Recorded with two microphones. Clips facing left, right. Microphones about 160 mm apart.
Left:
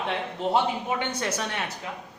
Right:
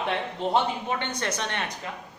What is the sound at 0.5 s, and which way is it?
Speech, 10° left (ahead or behind).